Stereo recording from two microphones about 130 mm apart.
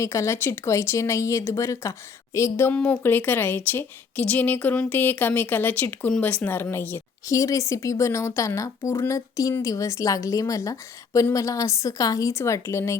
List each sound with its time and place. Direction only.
0.0 s a woman's voice: 20° left (ahead or behind)